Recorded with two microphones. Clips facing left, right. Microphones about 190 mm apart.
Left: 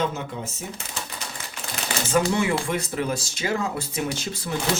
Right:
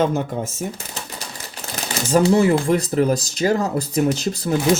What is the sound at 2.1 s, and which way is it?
Speech, 35° right (ahead or behind).